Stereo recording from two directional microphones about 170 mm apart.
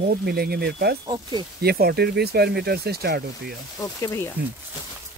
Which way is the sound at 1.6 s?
65° right (ahead or behind).